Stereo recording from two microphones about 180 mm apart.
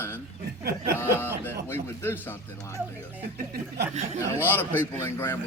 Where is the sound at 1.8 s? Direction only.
15° left (ahead or behind).